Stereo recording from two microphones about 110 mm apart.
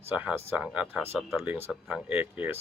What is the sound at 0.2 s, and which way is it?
Speech, 15° right (ahead or behind).